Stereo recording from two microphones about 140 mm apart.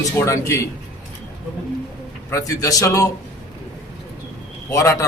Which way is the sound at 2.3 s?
25° left (ahead or behind).